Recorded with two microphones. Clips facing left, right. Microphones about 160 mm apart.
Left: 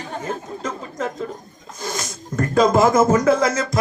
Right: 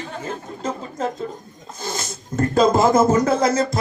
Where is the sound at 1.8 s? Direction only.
30° right (ahead or behind).